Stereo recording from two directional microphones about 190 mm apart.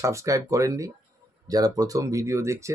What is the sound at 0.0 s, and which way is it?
Speech, 15° right (ahead or behind).